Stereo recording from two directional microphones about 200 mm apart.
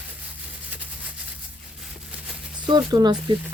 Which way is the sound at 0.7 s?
10° right (ahead or behind).